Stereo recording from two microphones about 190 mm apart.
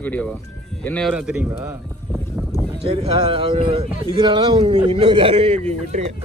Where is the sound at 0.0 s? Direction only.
10° left (ahead or behind).